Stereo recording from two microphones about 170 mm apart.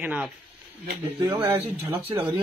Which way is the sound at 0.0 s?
10° right (ahead or behind).